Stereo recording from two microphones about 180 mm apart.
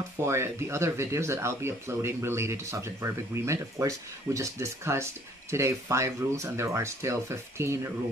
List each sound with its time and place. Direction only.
0.2 s speech: 15° right (ahead or behind)